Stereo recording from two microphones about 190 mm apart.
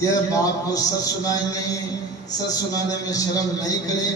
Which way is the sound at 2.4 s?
20° left (ahead or behind).